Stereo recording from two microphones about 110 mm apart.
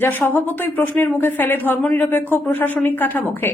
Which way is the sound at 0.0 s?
20° left (ahead or behind).